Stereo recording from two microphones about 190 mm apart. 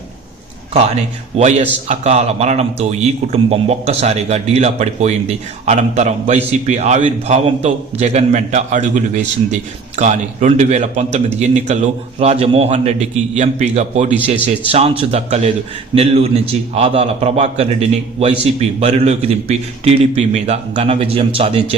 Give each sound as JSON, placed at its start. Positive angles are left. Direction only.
{"t": 1.4, "sound": "a man's voice", "side_deg": -35}